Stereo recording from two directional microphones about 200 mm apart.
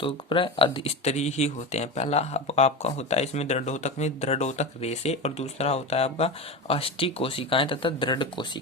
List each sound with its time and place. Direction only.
0.0 s speech: 25° left (ahead or behind)